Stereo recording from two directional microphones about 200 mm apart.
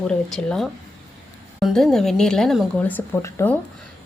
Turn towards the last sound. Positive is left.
turn(degrees=15)  # may be behind; listen again after turning